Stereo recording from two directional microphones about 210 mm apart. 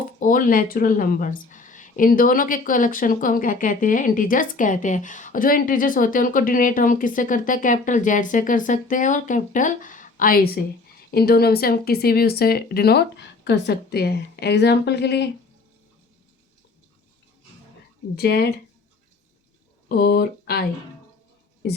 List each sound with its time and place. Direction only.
0.2 s speech: 40° left (ahead or behind)
18.2 s speech: 50° left (ahead or behind)
20.0 s speech: 50° left (ahead or behind)